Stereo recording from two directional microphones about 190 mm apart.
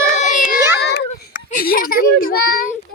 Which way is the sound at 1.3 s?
45° left (ahead or behind).